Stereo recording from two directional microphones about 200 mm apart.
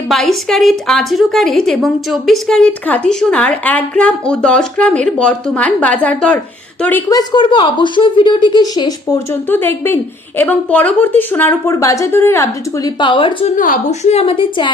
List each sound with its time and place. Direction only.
0.1 s a woman's voice: centre (ahead or behind)
7.1 s a woman's voice: 20° left (ahead or behind)
13.6 s a woman's voice: 40° left (ahead or behind)